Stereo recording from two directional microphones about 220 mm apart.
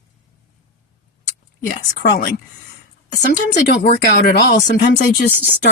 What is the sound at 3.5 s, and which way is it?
Speech, 50° left (ahead or behind).